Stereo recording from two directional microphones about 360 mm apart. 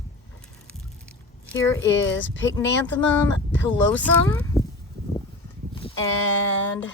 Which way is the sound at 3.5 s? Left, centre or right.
Centre.